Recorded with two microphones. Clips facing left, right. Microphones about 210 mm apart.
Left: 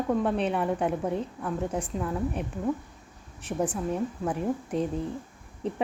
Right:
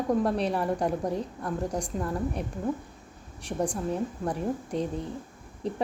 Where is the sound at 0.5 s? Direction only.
Centre (ahead or behind).